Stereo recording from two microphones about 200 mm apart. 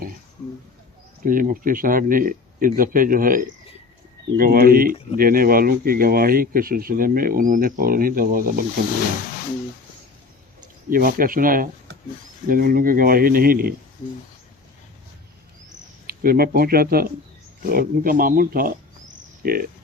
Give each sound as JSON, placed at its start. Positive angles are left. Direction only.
{"t": 1.2, "sound": "speech", "side_deg": -45}
{"t": 10.8, "sound": "speech", "side_deg": -45}
{"t": 16.0, "sound": "speech", "side_deg": -50}